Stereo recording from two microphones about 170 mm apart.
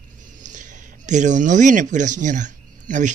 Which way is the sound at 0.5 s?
50° right (ahead or behind).